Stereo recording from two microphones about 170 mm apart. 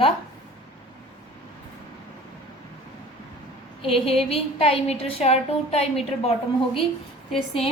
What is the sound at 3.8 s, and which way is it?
A woman's voice, 35° left (ahead or behind).